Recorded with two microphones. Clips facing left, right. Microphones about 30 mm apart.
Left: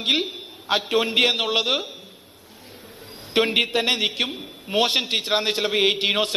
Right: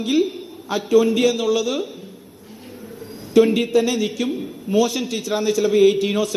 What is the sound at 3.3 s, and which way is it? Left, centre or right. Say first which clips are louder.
A man's voice: right 5 dB; left.